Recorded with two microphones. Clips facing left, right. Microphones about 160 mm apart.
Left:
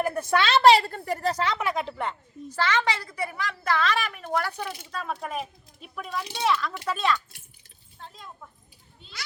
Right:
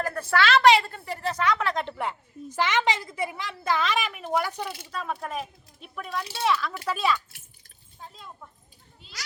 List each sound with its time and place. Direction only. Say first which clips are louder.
0.0 s a woman's voice: left 1 dB; 15° left (ahead or behind); by 1.5 s 35° left (ahead or behind)
1.5 s speech: even; 10° left (ahead or behind)
2.6 s a woman's voice: right 1 dB; 20° right (ahead or behind)
4.9 s a woman's voice: even; centre (ahead or behind)